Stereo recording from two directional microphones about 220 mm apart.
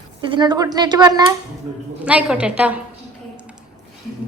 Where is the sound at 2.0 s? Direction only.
5° right (ahead or behind).